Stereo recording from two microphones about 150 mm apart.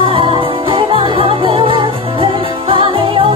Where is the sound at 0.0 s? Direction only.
35° right (ahead or behind).